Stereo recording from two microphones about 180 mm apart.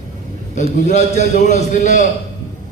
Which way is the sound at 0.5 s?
40° left (ahead or behind).